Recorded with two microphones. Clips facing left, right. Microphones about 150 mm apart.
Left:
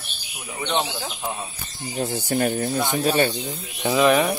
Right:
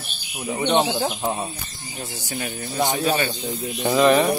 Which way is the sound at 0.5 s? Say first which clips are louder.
Right 5 dB; 30° right (ahead or behind).